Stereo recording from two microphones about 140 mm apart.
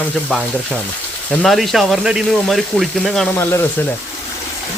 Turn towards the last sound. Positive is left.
turn(degrees=15)  # may be behind; listen again after turning